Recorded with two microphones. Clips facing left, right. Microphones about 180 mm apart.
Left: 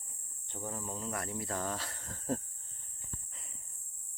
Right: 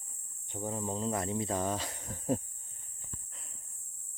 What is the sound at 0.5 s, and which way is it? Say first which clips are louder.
Speech: right 5 dB; 20° right (ahead or behind).